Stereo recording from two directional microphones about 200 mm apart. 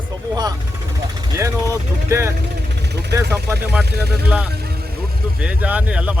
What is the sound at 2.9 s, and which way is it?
Vehicle, 55° right (ahead or behind).